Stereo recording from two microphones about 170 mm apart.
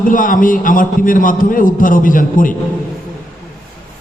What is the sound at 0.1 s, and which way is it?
A man's voice, 50° left (ahead or behind).